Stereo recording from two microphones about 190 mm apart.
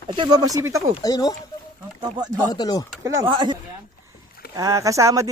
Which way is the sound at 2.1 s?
20° right (ahead or behind).